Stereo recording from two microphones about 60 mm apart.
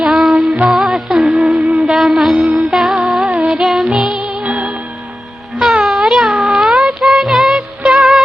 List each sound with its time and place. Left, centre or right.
0.0 s music: centre
1.6 s a sound: centre
2.0 s mantra: centre
2.6 s music: centre
3.2 s music: centre
3.5 s music: centre
5.8 s music: centre